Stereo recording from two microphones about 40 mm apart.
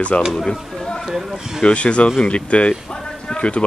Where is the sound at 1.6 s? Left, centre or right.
Left.